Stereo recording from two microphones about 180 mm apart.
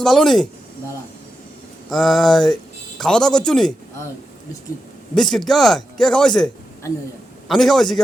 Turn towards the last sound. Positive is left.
turn(degrees=0)  # may be behind; listen again after turning